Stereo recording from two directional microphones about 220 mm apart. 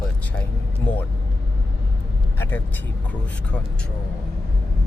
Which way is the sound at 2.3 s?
10° left (ahead or behind).